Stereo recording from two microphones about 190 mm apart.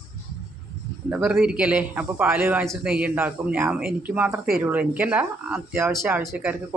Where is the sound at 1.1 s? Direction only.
5° right (ahead or behind).